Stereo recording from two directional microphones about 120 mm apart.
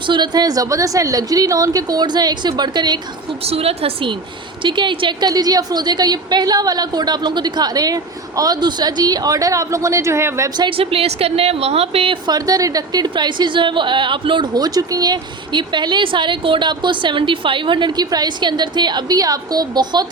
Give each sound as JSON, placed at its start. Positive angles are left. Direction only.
{"t": 0.1, "sound": "a woman's voice", "side_deg": -35}
{"t": 3.4, "sound": "a woman's voice", "side_deg": -55}
{"t": 4.6, "sound": "a woman's voice", "side_deg": -45}
{"t": 10.6, "sound": "a woman's voice", "side_deg": -50}
{"t": 12.2, "sound": "a woman's voice", "side_deg": -35}